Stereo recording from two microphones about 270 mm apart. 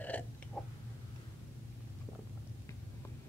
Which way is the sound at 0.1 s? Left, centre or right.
Centre.